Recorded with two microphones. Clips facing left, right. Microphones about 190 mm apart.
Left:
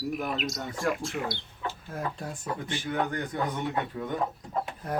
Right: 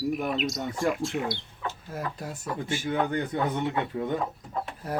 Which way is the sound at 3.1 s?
25° right (ahead or behind).